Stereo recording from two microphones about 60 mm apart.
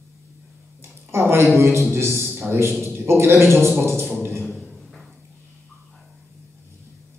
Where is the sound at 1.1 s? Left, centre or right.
Right.